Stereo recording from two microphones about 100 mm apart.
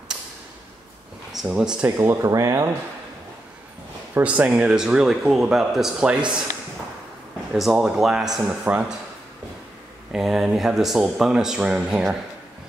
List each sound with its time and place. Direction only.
1.3 s speech: 5° right (ahead or behind)
1.9 s speech: 30° right (ahead or behind)
4.1 s speech: 15° right (ahead or behind)
7.5 s speech: 5° right (ahead or behind)
10.1 s speech: 5° right (ahead or behind)